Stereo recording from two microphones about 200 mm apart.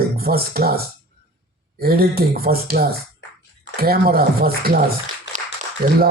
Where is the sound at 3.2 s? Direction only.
65° left (ahead or behind).